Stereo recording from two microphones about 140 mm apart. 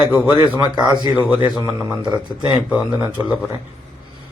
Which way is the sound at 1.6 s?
20° right (ahead or behind).